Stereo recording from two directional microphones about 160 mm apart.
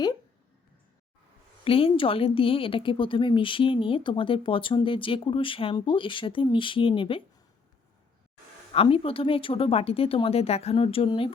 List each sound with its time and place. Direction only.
1.6 s speech: 35° left (ahead or behind)
8.7 s speech: 35° left (ahead or behind)